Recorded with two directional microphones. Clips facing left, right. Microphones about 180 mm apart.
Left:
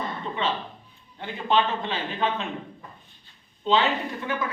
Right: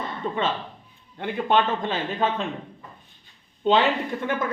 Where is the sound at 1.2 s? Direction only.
55° right (ahead or behind).